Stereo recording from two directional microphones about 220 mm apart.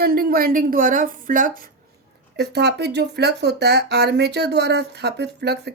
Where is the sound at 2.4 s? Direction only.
50° right (ahead or behind).